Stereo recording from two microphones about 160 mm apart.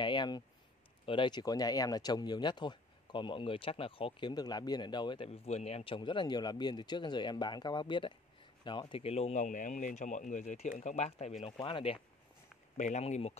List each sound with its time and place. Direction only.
0.0 s a sound: 30° left (ahead or behind)
1.0 s speech: 30° left (ahead or behind)
11.4 s speech: 35° left (ahead or behind)
12.7 s speech: 45° left (ahead or behind)